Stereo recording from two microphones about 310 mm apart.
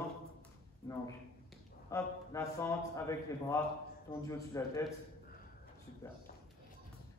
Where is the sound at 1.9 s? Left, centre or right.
Centre.